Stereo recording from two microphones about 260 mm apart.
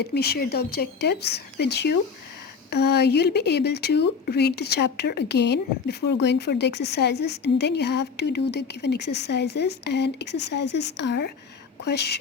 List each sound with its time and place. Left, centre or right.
0.0 s a woman's voice: left